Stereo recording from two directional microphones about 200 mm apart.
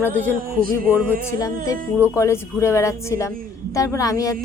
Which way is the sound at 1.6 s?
15° left (ahead or behind).